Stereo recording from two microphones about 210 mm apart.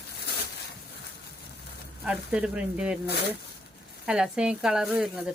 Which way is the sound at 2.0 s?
5° right (ahead or behind).